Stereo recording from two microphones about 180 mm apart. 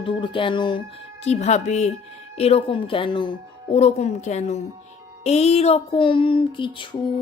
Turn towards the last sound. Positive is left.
turn(degrees=25)  # may be behind; listen again after turning